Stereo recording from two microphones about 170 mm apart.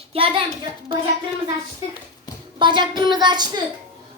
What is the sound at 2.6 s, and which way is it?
A child's voice, 25° right (ahead or behind).